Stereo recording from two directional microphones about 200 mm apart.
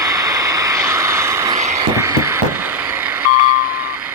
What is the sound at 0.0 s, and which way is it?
Vehicle, 15° right (ahead or behind).